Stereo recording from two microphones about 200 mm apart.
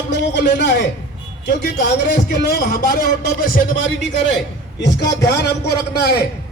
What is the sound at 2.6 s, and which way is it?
Speech, 45° left (ahead or behind).